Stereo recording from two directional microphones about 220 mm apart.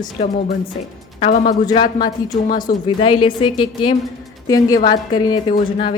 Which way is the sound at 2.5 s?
35° left (ahead or behind).